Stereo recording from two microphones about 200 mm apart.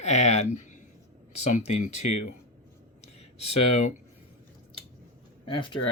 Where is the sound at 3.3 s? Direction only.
30° left (ahead or behind).